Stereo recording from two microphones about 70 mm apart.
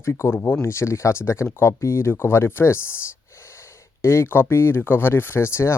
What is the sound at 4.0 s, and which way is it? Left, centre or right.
Speech, left.